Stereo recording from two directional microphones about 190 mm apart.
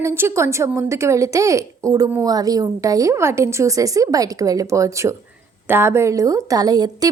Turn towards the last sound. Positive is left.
turn(degrees=-20)  # may be behind; listen again after turning